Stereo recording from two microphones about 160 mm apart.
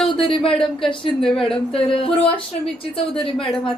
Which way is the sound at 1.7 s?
35° left (ahead or behind).